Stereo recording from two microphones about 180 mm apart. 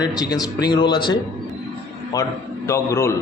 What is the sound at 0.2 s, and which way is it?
A man's voice, 20° left (ahead or behind).